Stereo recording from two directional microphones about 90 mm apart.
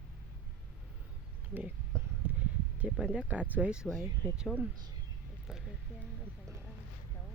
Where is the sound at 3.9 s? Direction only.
10° right (ahead or behind).